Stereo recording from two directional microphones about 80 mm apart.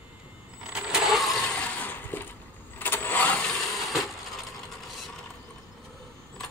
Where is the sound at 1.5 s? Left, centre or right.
Centre.